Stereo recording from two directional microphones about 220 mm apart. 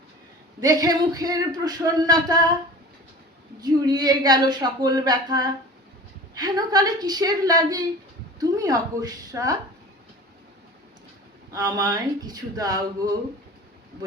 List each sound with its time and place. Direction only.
0.6 s speech: 15° right (ahead or behind)
3.6 s speech: 20° right (ahead or behind)
11.5 s speech: 15° right (ahead or behind)